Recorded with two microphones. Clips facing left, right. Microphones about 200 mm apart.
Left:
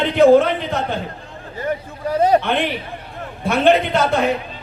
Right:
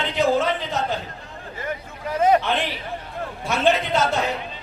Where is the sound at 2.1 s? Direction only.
35° left (ahead or behind).